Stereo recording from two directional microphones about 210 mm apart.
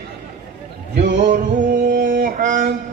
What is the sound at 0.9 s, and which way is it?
Music, 50° right (ahead or behind).